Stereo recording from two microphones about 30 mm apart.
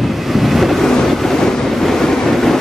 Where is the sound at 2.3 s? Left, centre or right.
Centre.